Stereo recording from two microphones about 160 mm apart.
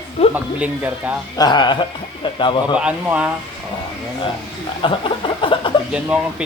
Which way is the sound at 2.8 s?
10° right (ahead or behind).